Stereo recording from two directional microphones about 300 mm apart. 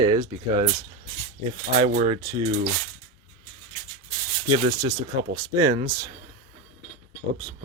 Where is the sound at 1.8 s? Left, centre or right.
Right.